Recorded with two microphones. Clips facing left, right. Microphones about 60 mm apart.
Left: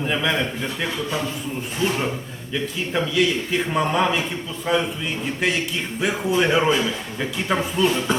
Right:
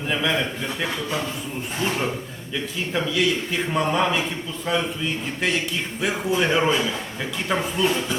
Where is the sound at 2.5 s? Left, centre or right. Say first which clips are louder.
Left 2 dB; centre.